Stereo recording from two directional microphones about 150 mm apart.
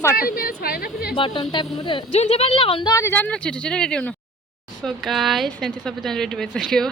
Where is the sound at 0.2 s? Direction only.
75° left (ahead or behind).